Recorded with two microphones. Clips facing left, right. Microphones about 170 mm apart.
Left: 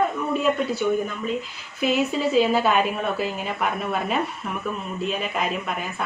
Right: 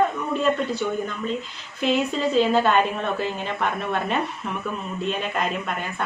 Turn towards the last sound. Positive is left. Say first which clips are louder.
# even
turn(degrees=5)  # may be behind; listen again after turning